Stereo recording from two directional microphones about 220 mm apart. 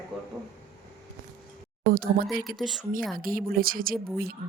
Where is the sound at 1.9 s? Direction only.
40° right (ahead or behind).